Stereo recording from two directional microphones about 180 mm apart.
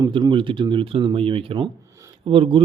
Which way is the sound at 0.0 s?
25° right (ahead or behind).